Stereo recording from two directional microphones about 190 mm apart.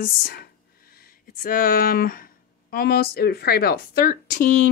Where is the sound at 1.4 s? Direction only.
50° left (ahead or behind).